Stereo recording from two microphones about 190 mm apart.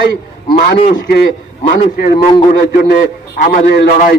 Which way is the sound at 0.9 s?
55° left (ahead or behind).